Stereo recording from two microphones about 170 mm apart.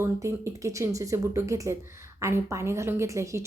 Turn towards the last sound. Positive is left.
turn(degrees=-15)  # may be behind; listen again after turning